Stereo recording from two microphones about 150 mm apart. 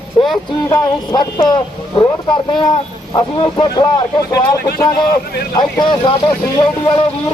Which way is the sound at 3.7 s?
25° left (ahead or behind).